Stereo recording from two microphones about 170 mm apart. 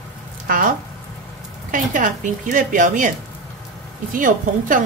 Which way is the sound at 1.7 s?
50° right (ahead or behind).